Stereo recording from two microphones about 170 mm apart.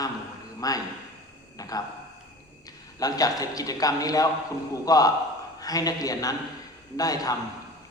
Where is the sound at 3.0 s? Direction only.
20° left (ahead or behind).